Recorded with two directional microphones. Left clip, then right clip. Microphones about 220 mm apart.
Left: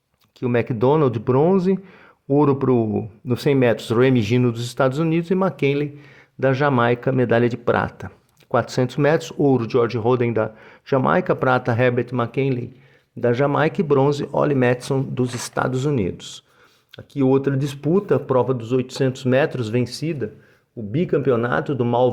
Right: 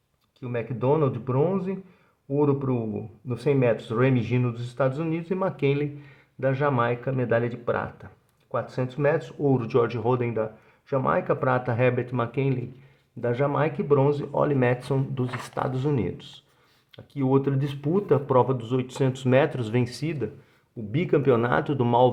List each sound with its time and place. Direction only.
0.3 s speech: 45° left (ahead or behind); by 22.1 s 10° left (ahead or behind)